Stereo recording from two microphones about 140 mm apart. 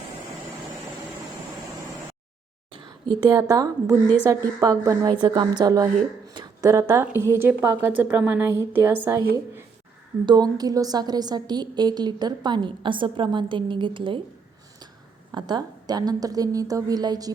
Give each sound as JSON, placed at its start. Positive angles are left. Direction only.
{"t": 3.5, "sound": "a woman's voice", "side_deg": -25}
{"t": 10.2, "sound": "a woman's voice", "side_deg": -30}
{"t": 15.3, "sound": "a woman's voice", "side_deg": -30}